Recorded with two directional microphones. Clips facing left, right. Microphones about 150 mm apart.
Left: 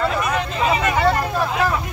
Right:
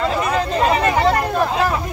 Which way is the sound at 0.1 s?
35° right (ahead or behind).